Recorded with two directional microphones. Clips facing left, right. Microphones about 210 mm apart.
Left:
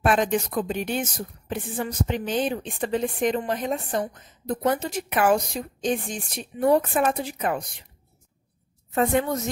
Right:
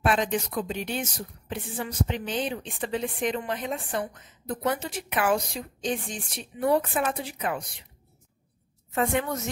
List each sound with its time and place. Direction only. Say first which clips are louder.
0.0 s a woman's voice: left 3 dB; 50° left (ahead or behind)
8.9 s a woman's voice: left 4 dB; 35° left (ahead or behind)